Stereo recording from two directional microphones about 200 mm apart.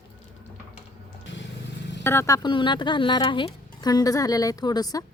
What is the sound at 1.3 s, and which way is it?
Vehicle, 65° left (ahead or behind).